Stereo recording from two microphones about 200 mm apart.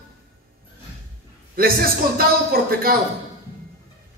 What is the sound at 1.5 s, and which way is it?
A man's voice, 50° right (ahead or behind).